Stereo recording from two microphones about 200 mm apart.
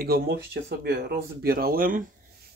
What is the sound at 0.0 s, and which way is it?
Speech, 50° right (ahead or behind).